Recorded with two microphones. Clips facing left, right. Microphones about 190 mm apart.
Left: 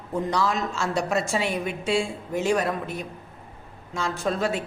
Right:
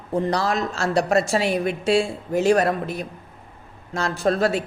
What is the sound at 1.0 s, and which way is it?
Speech, 70° right (ahead or behind).